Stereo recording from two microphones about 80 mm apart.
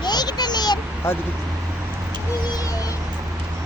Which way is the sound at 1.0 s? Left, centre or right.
Left.